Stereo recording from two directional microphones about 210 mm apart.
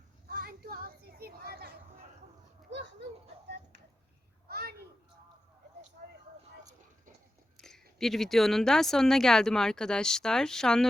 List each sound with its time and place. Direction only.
0.3 s children playing: 45° right (ahead or behind)
4.4 s a sound: 45° right (ahead or behind)
7.6 s speech: centre (ahead or behind)